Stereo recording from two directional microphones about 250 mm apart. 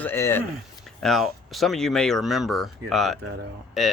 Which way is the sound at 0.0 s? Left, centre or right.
Centre.